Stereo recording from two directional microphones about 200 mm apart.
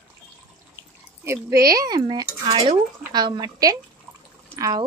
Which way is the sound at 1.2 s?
15° right (ahead or behind).